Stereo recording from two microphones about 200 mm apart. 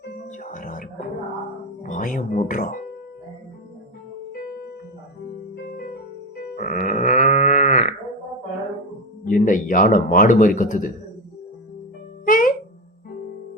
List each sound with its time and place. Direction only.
0.3 s music: 40° left (ahead or behind)
1.8 s speech: 40° left (ahead or behind)
5.7 s music: 45° left (ahead or behind)
9.2 s a man's voice: 40° left (ahead or behind)
12.2 s music: 40° left (ahead or behind)